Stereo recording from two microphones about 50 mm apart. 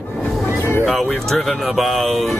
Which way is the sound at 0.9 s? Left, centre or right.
Centre.